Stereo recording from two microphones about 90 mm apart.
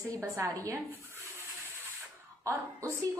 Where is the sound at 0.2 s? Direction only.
35° right (ahead or behind).